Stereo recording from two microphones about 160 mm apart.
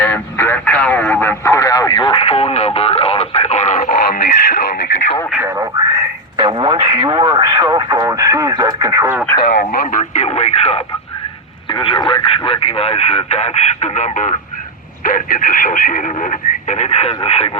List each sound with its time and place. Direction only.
0.0 s radio: 15° left (ahead or behind); by 3.5 s 40° left (ahead or behind)
3.8 s radio: 65° left (ahead or behind)
6.3 s speech: 25° right (ahead or behind)
9.4 s speech: 50° left (ahead or behind)